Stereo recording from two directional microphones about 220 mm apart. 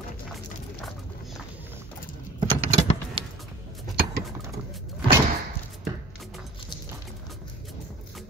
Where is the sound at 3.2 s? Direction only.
25° right (ahead or behind).